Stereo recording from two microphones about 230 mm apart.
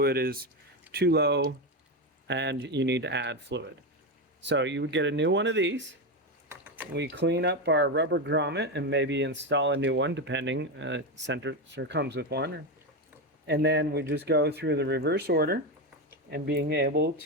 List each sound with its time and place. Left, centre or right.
0.0 s speech: right
6.9 s speech: right
13.5 s speech: right